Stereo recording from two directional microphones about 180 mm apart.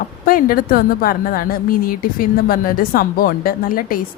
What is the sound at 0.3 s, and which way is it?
A woman's voice, 55° left (ahead or behind).